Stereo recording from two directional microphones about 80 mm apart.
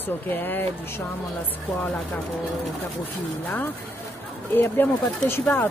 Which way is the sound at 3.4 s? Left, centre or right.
Left.